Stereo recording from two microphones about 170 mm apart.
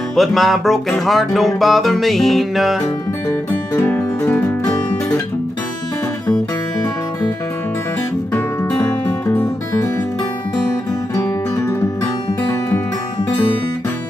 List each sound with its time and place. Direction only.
0.1 s music: centre (ahead or behind)
3.3 s music: 10° left (ahead or behind)
11.1 s music: 15° left (ahead or behind)